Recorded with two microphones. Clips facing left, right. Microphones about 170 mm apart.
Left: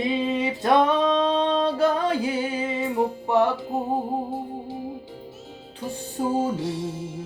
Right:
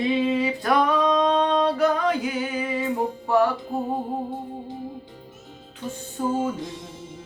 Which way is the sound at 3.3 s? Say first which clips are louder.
Right 2 dB; 20° left (ahead or behind).